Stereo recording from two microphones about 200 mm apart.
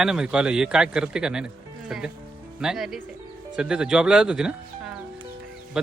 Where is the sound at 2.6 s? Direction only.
Centre (ahead or behind).